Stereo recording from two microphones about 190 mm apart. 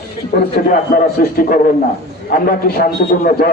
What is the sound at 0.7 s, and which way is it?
A man's voice, 45° left (ahead or behind).